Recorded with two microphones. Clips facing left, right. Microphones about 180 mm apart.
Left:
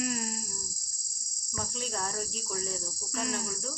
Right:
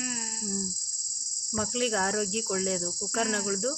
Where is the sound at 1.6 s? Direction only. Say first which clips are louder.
Right 8 dB; 90° right; by 3.7 s 75° right (ahead or behind).